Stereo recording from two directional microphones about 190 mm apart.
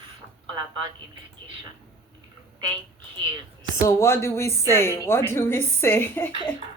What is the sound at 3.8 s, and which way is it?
Speech, 15° left (ahead or behind).